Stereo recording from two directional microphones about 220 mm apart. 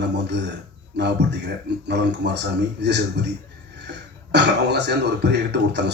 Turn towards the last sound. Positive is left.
turn(degrees=-50)  # may be behind; listen again after turning